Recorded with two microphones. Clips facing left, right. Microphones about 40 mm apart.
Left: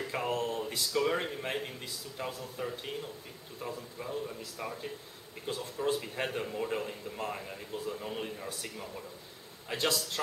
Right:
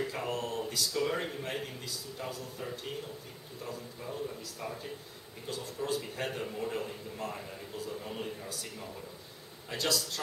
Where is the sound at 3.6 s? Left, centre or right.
Centre.